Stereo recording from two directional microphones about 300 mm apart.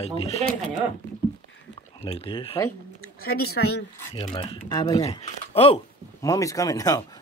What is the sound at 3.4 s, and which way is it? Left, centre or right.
Speech, left.